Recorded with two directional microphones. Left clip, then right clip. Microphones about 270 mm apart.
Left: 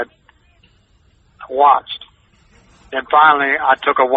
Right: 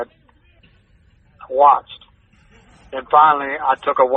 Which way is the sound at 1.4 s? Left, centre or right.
Left.